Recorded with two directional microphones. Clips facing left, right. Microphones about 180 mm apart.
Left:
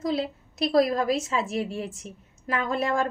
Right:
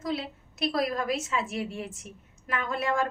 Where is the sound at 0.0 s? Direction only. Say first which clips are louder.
Left 5 dB; 35° left (ahead or behind).